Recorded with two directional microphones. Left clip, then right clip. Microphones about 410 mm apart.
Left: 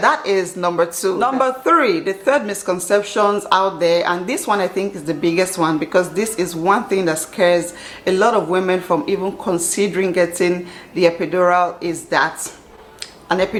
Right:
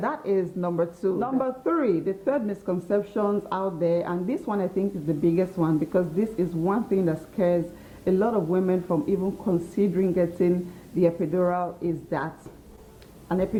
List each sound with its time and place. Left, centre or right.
0.0 s a woman's voice: centre
13.2 s speech: centre